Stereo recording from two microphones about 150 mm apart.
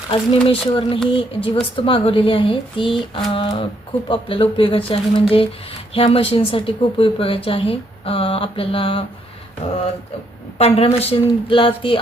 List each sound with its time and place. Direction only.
0.1 s speech: 40° left (ahead or behind)
10.6 s speech: 45° left (ahead or behind)